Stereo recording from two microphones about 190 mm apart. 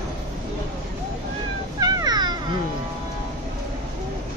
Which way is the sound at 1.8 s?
20° right (ahead or behind).